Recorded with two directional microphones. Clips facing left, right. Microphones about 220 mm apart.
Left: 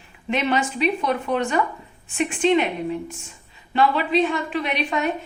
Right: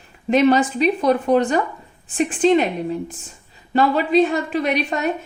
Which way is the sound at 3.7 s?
40° right (ahead or behind).